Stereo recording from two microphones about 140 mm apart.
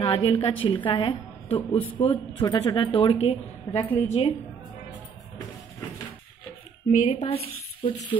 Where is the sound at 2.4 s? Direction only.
30° left (ahead or behind).